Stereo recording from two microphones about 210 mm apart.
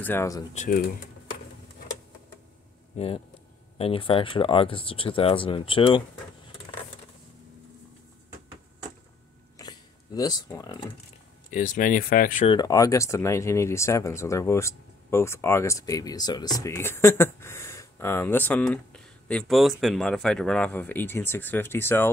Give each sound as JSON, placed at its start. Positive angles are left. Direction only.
{"t": 0.0, "sound": "speech", "side_deg": 10}
{"t": 0.6, "sound": "speech", "side_deg": 40}
{"t": 2.9, "sound": "speech", "side_deg": 35}
{"t": 9.6, "sound": "a sound", "side_deg": 20}
{"t": 11.5, "sound": "speech", "side_deg": 35}
{"t": 12.4, "sound": "speech", "side_deg": 20}